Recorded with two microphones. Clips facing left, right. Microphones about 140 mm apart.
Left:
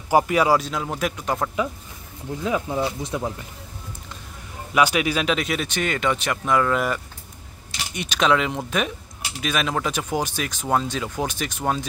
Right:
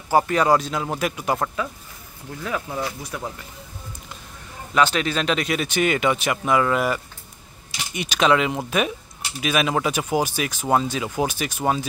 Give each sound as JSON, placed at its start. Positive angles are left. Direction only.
{"t": 0.2, "sound": "speech", "side_deg": 5}
{"t": 2.4, "sound": "speech", "side_deg": 20}
{"t": 4.7, "sound": "speech", "side_deg": 10}